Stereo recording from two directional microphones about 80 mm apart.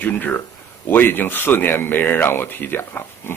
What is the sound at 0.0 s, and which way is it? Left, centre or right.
Speech, left.